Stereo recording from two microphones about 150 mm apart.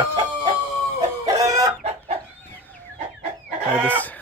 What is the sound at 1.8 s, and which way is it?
Chicken, 45° right (ahead or behind).